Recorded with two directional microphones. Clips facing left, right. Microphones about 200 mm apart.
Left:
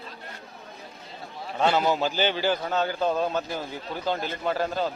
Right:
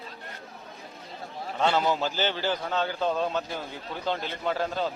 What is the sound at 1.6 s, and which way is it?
A man's voice, 10° left (ahead or behind).